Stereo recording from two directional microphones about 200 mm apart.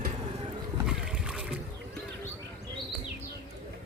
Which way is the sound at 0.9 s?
5° right (ahead or behind).